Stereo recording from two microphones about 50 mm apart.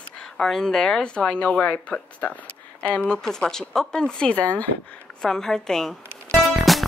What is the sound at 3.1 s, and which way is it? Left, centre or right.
Speech, centre.